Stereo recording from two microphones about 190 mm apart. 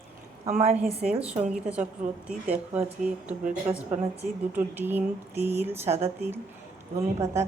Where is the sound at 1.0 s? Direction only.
5° right (ahead or behind).